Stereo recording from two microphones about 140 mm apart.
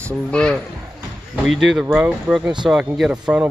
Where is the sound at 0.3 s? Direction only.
5° left (ahead or behind).